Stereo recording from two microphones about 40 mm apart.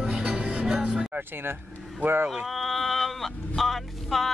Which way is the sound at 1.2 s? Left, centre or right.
Right.